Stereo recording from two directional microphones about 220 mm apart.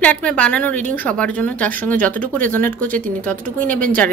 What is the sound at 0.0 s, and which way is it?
Speech, 5° left (ahead or behind).